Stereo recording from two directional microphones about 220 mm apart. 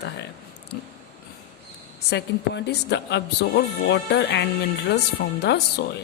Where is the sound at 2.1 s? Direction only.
50° left (ahead or behind).